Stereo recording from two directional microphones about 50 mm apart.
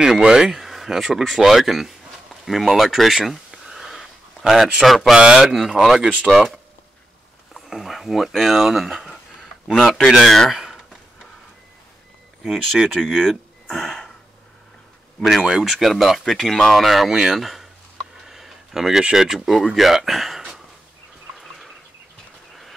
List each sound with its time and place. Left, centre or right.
0.0 s speech: centre
2.4 s a sound: centre
4.8 s speech: centre
5.1 s speech: centre
5.5 s speech: centre
7.5 s speech: centre
10.5 s a sound: centre
12.4 s speech: centre
13.2 s a sound: centre
15.1 s speech: centre
17.1 s speech: centre
18.1 s a sound: centre
19.2 s speech: centre
21.4 s turkey: centre